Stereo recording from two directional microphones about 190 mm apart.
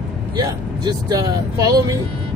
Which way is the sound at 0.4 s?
20° right (ahead or behind).